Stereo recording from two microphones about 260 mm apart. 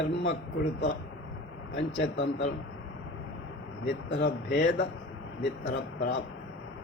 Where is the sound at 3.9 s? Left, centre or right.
Left.